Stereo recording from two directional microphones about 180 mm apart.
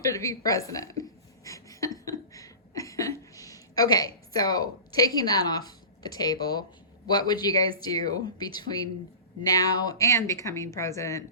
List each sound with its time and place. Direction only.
0.1 s speech: 15° left (ahead or behind)
1.5 s a sound: 20° left (ahead or behind)
7.1 s speech: 20° left (ahead or behind)